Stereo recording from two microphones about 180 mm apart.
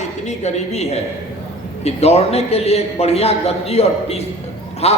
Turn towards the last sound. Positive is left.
turn(degrees=35)  # may be behind; listen again after turning